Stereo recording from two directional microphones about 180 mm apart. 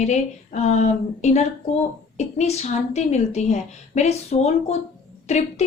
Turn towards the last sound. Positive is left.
turn(degrees=40)  # may be behind; listen again after turning